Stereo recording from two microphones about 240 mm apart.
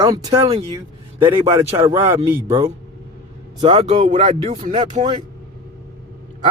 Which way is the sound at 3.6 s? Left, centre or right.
Right.